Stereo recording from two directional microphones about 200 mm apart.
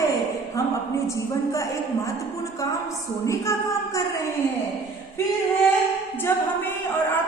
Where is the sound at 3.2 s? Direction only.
15° left (ahead or behind).